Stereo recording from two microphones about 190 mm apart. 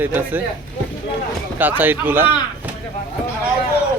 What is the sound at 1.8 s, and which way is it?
Speech, 10° right (ahead or behind).